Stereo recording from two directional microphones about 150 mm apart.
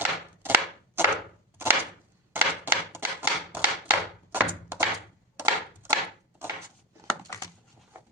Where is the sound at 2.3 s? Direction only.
15° right (ahead or behind).